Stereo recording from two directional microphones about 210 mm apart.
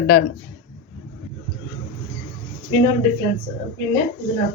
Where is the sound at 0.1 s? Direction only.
90° left.